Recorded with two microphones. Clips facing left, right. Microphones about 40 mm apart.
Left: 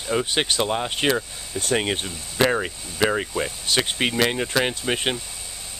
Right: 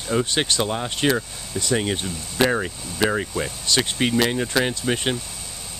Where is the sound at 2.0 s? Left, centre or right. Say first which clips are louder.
Even; centre.